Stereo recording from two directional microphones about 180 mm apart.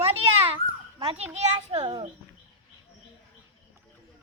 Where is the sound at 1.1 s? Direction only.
35° right (ahead or behind).